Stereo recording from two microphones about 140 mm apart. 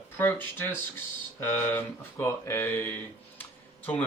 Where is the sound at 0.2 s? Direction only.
15° left (ahead or behind).